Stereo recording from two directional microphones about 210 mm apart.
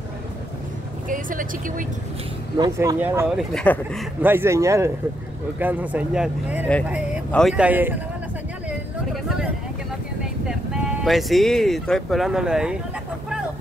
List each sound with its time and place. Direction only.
1.0 s speech: 40° right (ahead or behind)
2.5 s speech: 20° right (ahead or behind); by 4.1 s 5° left (ahead or behind)
4.2 s speech: 10° right (ahead or behind)
8.6 s a sound: 5° right (ahead or behind)
10.4 s speech: centre (ahead or behind)